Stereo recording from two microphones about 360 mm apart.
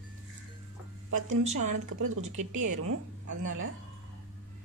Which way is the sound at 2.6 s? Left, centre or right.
Right.